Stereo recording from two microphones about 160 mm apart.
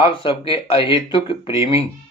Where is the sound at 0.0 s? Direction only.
35° left (ahead or behind).